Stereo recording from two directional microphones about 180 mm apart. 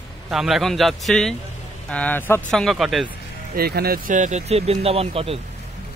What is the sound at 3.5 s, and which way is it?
Speech, 60° right (ahead or behind).